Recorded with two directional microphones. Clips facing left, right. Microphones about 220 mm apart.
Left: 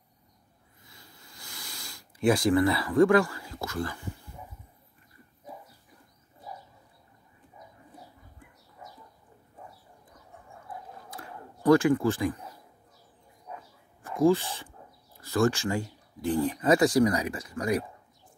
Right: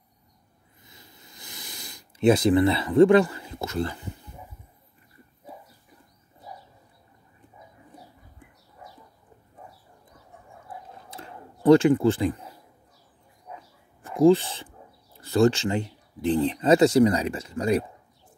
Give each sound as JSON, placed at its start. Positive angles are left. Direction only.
{"t": 0.8, "sound": "sniff", "side_deg": -20}
{"t": 11.1, "sound": "a sound", "side_deg": -25}
{"t": 14.0, "sound": "speech", "side_deg": -25}